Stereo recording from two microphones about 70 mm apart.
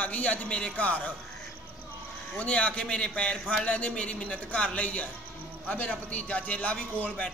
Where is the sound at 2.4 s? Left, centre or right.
Centre.